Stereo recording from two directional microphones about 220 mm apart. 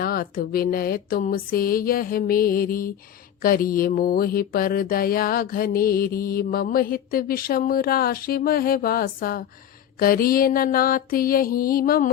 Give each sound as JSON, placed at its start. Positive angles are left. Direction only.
{"t": 0.0, "sound": "mantra", "side_deg": 40}